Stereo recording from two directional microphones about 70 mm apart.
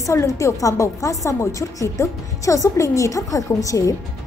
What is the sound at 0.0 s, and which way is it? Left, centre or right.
A woman's voice, left.